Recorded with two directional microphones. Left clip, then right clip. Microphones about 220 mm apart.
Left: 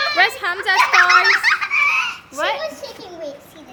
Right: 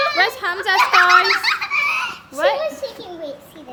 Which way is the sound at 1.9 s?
35° right (ahead or behind).